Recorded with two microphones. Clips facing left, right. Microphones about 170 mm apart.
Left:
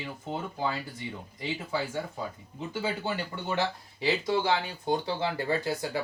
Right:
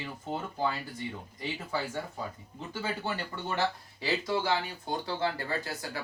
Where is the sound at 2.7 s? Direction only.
15° left (ahead or behind).